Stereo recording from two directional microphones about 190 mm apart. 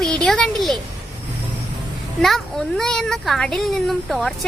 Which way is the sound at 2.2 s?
Centre (ahead or behind).